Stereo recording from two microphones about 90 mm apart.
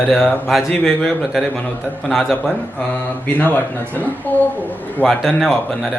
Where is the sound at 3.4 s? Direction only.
20° left (ahead or behind).